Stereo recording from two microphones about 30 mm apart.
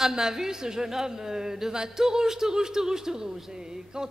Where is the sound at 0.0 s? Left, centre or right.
Centre.